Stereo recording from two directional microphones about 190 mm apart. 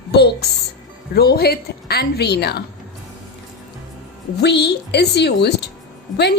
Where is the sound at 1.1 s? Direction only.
55° left (ahead or behind).